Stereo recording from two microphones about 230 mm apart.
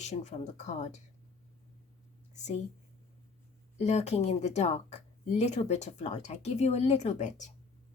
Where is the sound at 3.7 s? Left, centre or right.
Left.